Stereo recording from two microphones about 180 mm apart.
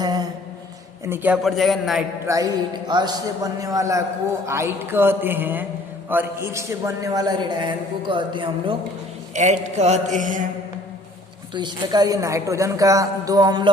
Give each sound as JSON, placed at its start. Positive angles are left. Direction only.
{"t": 0.0, "sound": "a sound", "side_deg": -20}
{"t": 1.0, "sound": "a man's voice", "side_deg": -10}
{"t": 2.2, "sound": "a man's voice", "side_deg": -20}
{"t": 9.3, "sound": "mantra", "side_deg": -40}
{"t": 11.5, "sound": "a man's voice", "side_deg": -25}